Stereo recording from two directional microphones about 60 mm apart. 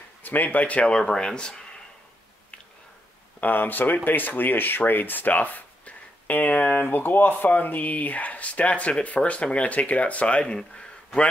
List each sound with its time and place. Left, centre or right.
0.2 s speech: left; by 1.6 s centre
3.3 s speech: left